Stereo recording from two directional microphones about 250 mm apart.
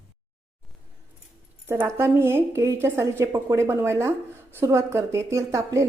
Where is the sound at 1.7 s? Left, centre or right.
Centre.